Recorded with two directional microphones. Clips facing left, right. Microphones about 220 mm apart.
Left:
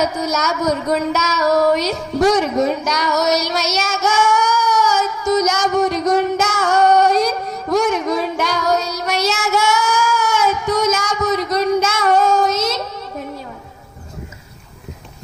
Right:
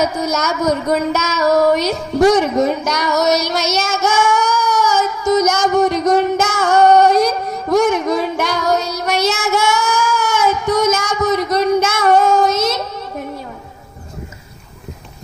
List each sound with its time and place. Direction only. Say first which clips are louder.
0.2 s speech: right 2 dB; 55° right (ahead or behind)
1.1 s female singing: right 1 dB; 30° right (ahead or behind)
1.7 s speech: right 2 dB; 55° right (ahead or behind)
4.0 s a sound: even; 55° right (ahead or behind)
5.3 s child singing: right 2 dB; 55° right (ahead or behind)
7.7 s music: right 3 dB; 55° right (ahead or behind)
8.9 s child singing: right 2 dB; 55° right (ahead or behind)